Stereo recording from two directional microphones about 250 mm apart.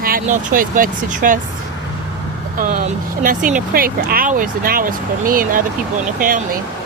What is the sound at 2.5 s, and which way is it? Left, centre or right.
Speech, right.